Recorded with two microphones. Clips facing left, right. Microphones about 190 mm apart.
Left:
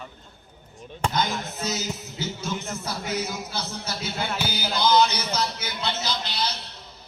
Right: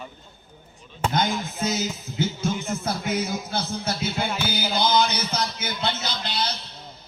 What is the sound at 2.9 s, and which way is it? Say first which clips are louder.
Speech: right 3 dB; 55° right (ahead or behind).